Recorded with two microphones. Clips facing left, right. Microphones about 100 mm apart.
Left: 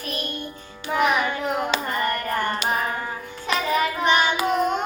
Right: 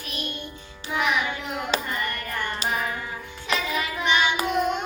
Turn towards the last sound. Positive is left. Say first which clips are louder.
# left 2 dB
turn(degrees=40)  # may be behind; listen again after turning